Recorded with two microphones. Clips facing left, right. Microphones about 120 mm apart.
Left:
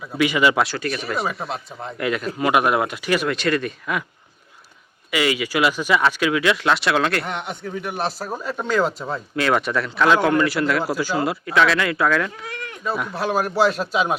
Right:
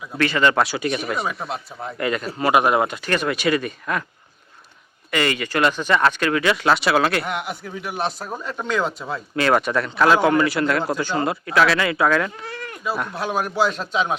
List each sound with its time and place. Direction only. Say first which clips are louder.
0.2 s speech: left 1 dB; 10° left (ahead or behind)
0.8 s speech: right 3 dB; 15° right (ahead or behind)
1.0 s speech: even; centre (ahead or behind)
5.1 s speech: left 1 dB; 5° left (ahead or behind)
12.5 s goat: even; 35° right (ahead or behind)
12.7 s speech: left 1 dB; centre (ahead or behind)